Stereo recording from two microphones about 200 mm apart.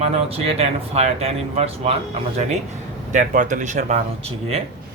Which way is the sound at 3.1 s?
40° right (ahead or behind).